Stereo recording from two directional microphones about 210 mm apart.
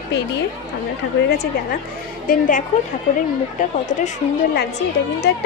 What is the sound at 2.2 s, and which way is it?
A woman's voice, 40° left (ahead or behind).